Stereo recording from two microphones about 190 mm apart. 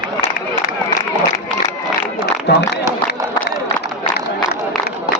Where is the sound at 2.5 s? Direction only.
60° left (ahead or behind).